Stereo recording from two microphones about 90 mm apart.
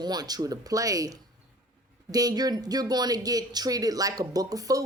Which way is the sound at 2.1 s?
45° right (ahead or behind).